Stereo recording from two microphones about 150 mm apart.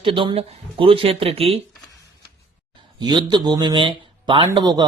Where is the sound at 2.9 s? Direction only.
30° right (ahead or behind).